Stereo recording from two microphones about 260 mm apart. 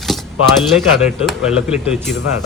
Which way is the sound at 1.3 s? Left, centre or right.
Centre.